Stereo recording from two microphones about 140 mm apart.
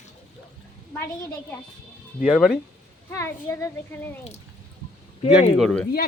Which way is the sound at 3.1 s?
20° left (ahead or behind).